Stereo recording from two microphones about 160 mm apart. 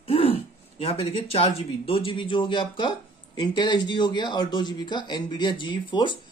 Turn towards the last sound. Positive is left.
turn(degrees=30)  # may be behind; listen again after turning